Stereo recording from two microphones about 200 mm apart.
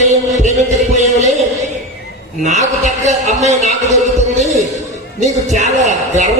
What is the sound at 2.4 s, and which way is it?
A man's voice, 35° right (ahead or behind).